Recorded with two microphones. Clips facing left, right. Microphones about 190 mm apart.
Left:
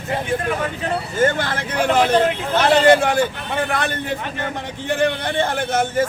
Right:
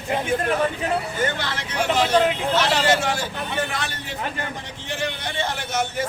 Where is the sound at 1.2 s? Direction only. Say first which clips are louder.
Left 7 dB; 50° left (ahead or behind).